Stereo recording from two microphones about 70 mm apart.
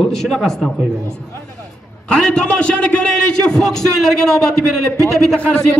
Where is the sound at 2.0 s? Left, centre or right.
Centre.